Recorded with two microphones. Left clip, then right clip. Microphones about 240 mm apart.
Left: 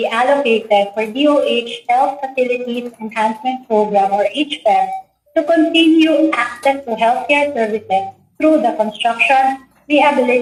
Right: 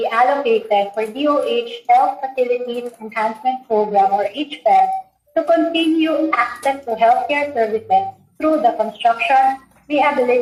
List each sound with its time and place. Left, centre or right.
0.0 s speech: left